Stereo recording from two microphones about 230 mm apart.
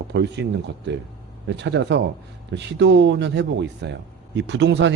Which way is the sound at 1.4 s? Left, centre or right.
Right.